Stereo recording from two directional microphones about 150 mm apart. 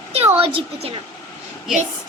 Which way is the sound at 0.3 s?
40° right (ahead or behind).